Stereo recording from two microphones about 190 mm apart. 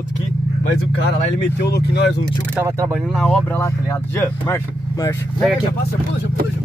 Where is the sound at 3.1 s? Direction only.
5° left (ahead or behind).